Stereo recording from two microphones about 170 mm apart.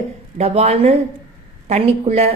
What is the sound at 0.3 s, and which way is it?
Speech, 40° right (ahead or behind).